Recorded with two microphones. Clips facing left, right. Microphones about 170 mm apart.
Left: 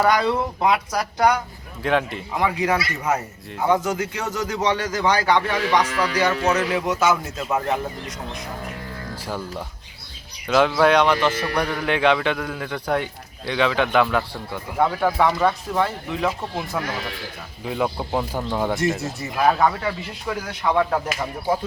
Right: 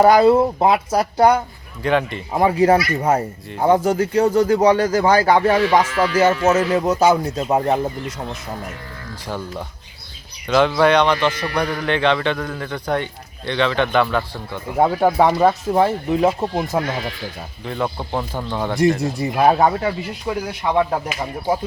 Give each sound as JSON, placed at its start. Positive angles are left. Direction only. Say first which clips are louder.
{"t": 0.1, "sound": "speech", "louder": "right 8 dB", "side_deg": -40}
{"t": 1.8, "sound": "speech", "louder": "right 3 dB", "side_deg": 0}
{"t": 2.3, "sound": "speech", "louder": "right 7 dB", "side_deg": -30}
{"t": 9.2, "sound": "speech", "louder": "right 3 dB", "side_deg": 5}
{"t": 14.8, "sound": "speech", "louder": "right 4 dB", "side_deg": -35}
{"t": 17.7, "sound": "speech", "louder": "even", "side_deg": 5}
{"t": 19.2, "sound": "speech", "louder": "right 4 dB", "side_deg": -30}
{"t": 20.7, "sound": "speech", "louder": "right 2 dB", "side_deg": -20}